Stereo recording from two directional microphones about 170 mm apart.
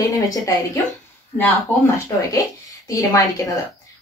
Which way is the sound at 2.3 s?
20° left (ahead or behind).